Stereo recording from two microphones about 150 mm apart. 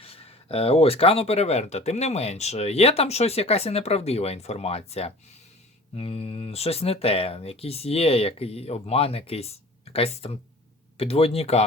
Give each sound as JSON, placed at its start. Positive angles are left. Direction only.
{"t": 0.0, "sound": "speech", "side_deg": 40}